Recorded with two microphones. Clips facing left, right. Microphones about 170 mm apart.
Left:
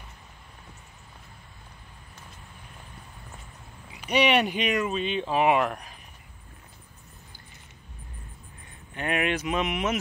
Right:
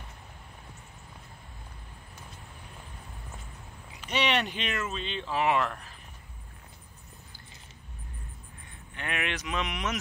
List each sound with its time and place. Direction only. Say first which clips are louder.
3.9 s speech: left 6 dB; 10° left (ahead or behind)
8.9 s speech: left 7 dB; 30° left (ahead or behind)
9.6 s speech: left 5 dB; 10° left (ahead or behind)